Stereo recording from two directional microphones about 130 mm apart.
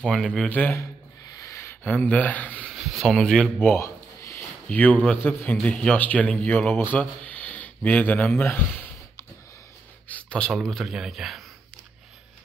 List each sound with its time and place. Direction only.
0.0 s speech: 5° left (ahead or behind)
1.4 s a sound: 20° left (ahead or behind)
2.0 s speech: 10° left (ahead or behind)
2.7 s speech: centre (ahead or behind)
3.6 s a sound: 20° left (ahead or behind)
4.6 s speech: 10° left (ahead or behind)
10.0 s speech: 10° left (ahead or behind)